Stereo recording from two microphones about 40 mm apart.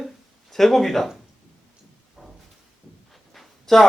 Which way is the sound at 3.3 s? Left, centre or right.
Centre.